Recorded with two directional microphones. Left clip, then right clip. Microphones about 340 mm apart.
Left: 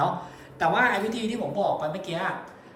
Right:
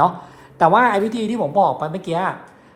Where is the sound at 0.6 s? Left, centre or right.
Centre.